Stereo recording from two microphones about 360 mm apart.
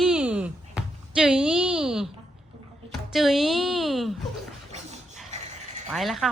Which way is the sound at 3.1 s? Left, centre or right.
Centre.